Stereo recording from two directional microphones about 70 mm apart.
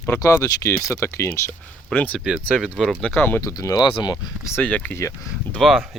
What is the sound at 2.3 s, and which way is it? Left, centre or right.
Speech, centre.